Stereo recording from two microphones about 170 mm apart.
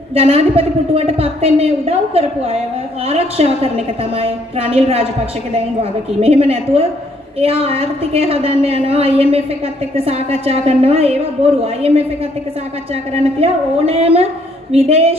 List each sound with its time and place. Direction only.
0.1 s a woman's voice: 35° right (ahead or behind)
6.2 s a woman's voice: 35° right (ahead or behind)
13.4 s a woman's voice: 35° right (ahead or behind)